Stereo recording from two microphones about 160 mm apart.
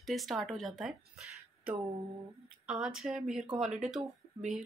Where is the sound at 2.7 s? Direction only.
5° right (ahead or behind).